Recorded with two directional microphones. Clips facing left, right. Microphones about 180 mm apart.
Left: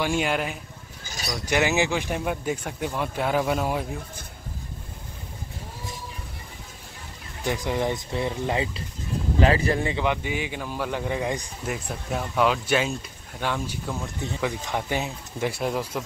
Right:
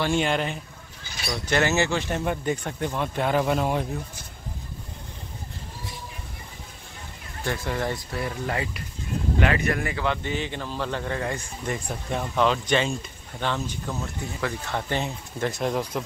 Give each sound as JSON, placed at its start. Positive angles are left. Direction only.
{"t": 0.0, "sound": "speech", "side_deg": 5}
{"t": 1.0, "sound": "a sound", "side_deg": 40}
{"t": 1.4, "sound": "speech", "side_deg": 10}
{"t": 7.4, "sound": "speech", "side_deg": 15}
{"t": 11.6, "sound": "speech", "side_deg": 5}